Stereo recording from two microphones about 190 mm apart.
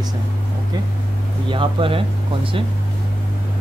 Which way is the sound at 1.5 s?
25° right (ahead or behind).